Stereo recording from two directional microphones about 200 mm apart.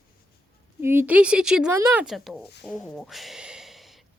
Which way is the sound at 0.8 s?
10° right (ahead or behind).